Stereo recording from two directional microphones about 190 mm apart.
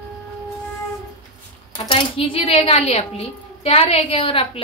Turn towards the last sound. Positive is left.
turn(degrees=30)  # may be behind; listen again after turning